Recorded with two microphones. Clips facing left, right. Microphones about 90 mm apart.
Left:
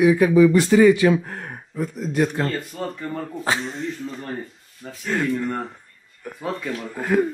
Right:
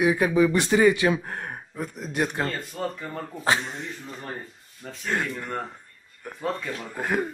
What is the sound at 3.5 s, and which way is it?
Speech, 10° right (ahead or behind).